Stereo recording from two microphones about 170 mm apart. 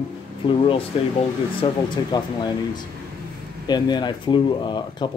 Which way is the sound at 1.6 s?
30° left (ahead or behind).